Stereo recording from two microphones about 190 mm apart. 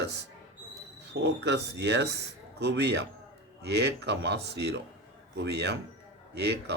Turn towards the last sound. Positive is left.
turn(degrees=-60)  # may be behind; listen again after turning